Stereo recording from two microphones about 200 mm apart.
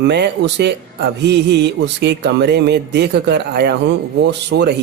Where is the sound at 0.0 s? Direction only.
55° right (ahead or behind).